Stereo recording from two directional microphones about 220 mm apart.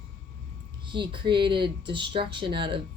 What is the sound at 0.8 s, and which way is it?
A woman's voice, 20° right (ahead or behind).